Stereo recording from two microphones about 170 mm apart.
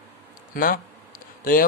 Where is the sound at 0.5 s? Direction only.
55° left (ahead or behind).